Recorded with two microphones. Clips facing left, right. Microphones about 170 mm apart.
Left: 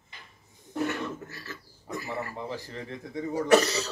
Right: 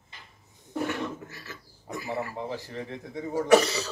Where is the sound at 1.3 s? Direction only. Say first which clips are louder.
Left 2 dB; 15° right (ahead or behind).